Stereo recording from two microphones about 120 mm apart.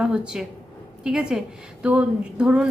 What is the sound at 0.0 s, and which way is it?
A woman's voice, 5° right (ahead or behind).